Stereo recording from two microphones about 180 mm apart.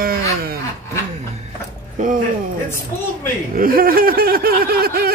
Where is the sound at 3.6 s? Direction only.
55° right (ahead or behind).